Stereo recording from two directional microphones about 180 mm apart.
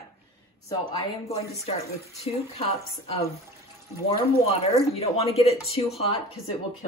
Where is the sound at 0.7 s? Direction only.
30° left (ahead or behind).